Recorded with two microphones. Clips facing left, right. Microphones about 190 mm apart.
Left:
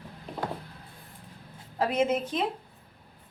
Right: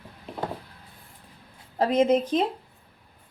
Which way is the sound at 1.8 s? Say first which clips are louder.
Right 5 dB; 35° right (ahead or behind).